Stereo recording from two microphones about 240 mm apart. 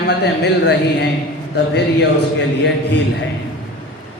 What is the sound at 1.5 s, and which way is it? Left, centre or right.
Speech, left.